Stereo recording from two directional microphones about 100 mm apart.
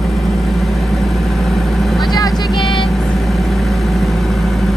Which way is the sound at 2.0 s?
40° left (ahead or behind).